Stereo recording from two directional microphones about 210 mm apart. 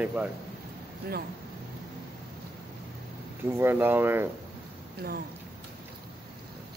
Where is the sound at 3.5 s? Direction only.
10° right (ahead or behind).